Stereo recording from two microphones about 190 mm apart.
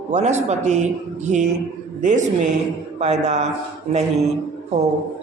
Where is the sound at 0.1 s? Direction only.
35° right (ahead or behind).